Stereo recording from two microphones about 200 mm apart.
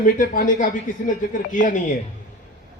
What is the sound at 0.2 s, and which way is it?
Speech, 45° left (ahead or behind).